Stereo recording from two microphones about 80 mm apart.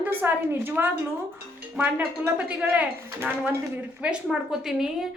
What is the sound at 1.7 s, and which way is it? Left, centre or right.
A woman's voice, centre.